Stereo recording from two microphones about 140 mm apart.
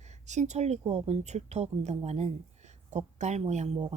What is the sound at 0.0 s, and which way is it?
A woman's voice, 55° right (ahead or behind).